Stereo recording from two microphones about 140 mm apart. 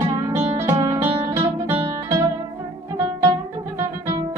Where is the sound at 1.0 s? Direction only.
45° right (ahead or behind).